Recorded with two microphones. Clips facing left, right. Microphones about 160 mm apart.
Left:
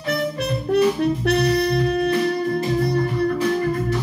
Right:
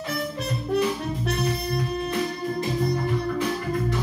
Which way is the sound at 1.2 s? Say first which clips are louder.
Left 7 dB; 70° left (ahead or behind).